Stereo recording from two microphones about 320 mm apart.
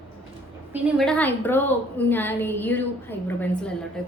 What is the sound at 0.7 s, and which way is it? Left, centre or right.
A woman's voice, centre.